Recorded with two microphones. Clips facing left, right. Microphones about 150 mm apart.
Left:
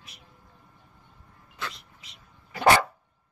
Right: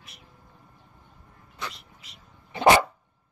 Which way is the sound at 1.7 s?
Centre (ahead or behind).